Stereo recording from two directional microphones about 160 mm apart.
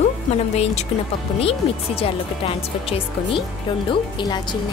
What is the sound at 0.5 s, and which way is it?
Speech, 40° left (ahead or behind).